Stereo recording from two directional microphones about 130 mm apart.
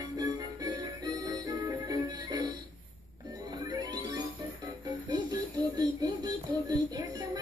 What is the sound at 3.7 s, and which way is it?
Music, 30° right (ahead or behind).